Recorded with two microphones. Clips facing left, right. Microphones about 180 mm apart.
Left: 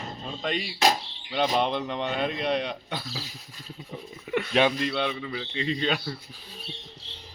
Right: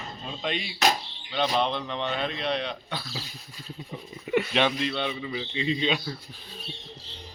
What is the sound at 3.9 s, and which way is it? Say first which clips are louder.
Speech: right 3 dB; centre (ahead or behind).